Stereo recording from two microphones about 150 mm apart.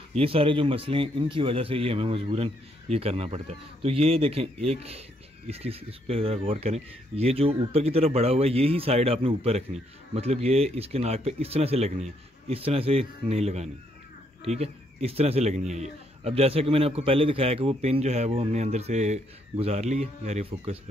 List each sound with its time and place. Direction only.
0.2 s a man's voice: 40° right (ahead or behind)